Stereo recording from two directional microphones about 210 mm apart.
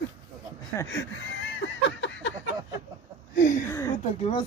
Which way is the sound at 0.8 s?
60° left (ahead or behind).